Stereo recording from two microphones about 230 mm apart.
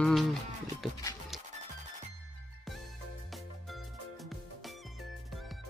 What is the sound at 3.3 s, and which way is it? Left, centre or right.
Music, centre.